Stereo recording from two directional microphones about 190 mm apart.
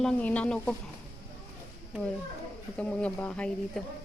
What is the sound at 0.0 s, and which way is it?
Speech, 5° left (ahead or behind).